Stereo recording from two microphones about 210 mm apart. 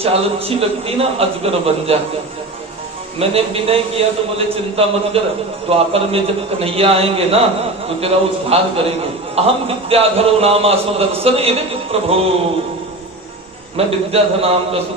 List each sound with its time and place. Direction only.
0.0 s a man's voice: 30° right (ahead or behind)
3.2 s a man's voice: 30° right (ahead or behind)
13.8 s a man's voice: 30° right (ahead or behind)